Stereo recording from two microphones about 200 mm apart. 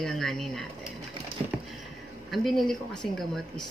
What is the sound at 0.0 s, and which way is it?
Speech, centre (ahead or behind).